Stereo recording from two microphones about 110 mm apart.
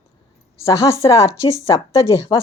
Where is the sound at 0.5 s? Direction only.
25° left (ahead or behind).